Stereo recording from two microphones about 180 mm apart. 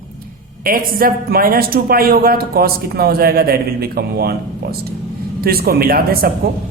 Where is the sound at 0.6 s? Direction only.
50° right (ahead or behind).